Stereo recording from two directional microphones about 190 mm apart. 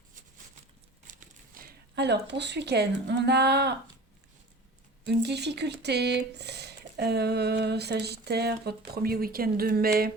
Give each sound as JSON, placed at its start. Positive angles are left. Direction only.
{"t": 1.0, "sound": "speech", "side_deg": -40}
{"t": 5.0, "sound": "speech", "side_deg": -60}